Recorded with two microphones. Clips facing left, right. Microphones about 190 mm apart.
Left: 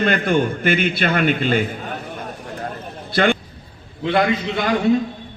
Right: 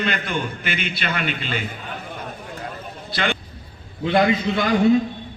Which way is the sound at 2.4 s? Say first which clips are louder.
Left 3 dB; 45° left (ahead or behind).